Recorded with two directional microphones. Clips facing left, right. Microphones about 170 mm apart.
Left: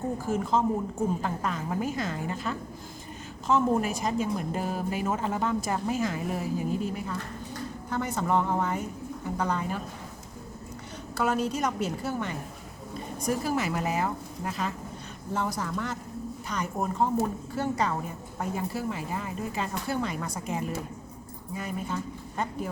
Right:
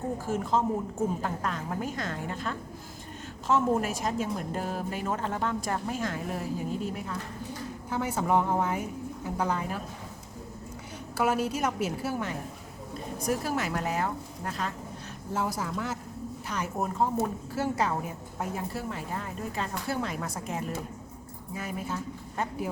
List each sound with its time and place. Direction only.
0.3 s a woman's voice: centre (ahead or behind)
11.2 s a woman's voice: 5° right (ahead or behind)